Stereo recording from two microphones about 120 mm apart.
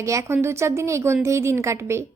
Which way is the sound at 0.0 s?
25° right (ahead or behind).